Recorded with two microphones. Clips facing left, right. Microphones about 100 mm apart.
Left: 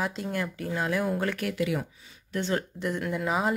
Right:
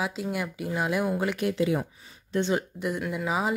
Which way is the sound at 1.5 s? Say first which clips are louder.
Right 3 dB; 25° right (ahead or behind).